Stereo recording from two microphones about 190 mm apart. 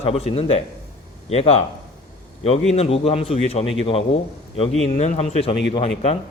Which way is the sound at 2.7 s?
30° left (ahead or behind).